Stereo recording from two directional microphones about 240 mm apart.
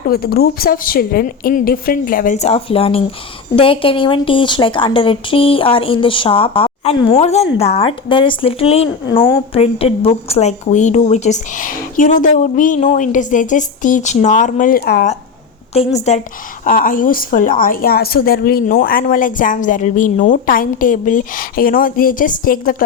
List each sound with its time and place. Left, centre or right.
0.1 s a woman's voice: left
15.7 s a woman's voice: left